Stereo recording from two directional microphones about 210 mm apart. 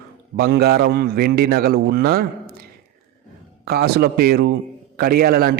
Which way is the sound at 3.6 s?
50° right (ahead or behind).